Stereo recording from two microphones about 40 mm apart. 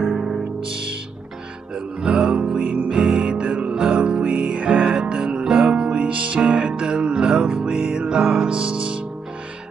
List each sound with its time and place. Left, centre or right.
2.0 s music: right